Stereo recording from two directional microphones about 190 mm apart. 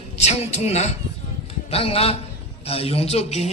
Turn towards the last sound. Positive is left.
turn(degrees=35)  # may be behind; listen again after turning